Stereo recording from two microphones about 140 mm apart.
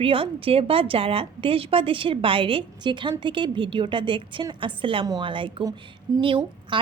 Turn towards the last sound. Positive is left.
turn(degrees=-35)  # may be behind; listen again after turning